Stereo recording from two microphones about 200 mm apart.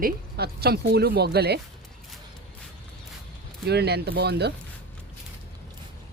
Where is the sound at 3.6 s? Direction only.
55° right (ahead or behind).